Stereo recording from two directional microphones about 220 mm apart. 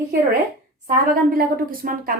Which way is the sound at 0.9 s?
40° right (ahead or behind).